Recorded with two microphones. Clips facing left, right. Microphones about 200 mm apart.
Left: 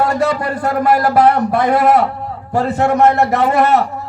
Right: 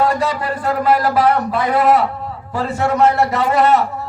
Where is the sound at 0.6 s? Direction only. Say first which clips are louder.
Left 1 dB; 45° left (ahead or behind).